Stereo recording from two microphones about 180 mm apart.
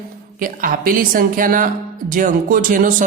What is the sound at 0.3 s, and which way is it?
A woman's voice, 50° right (ahead or behind).